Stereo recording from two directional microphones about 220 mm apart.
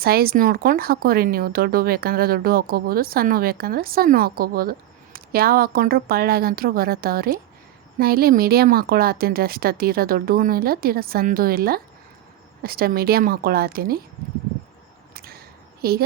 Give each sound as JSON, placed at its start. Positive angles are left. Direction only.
{"t": 0.0, "sound": "speech", "side_deg": -45}
{"t": 15.1, "sound": "whip", "side_deg": -45}
{"t": 15.8, "sound": "a woman's voice", "side_deg": -45}